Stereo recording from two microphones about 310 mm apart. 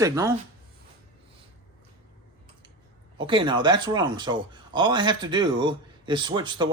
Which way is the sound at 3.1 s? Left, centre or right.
Centre.